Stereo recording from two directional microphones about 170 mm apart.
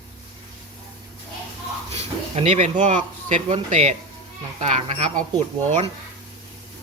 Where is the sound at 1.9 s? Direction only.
40° right (ahead or behind).